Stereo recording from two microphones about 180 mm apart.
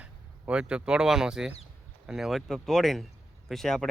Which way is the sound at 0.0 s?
5° right (ahead or behind).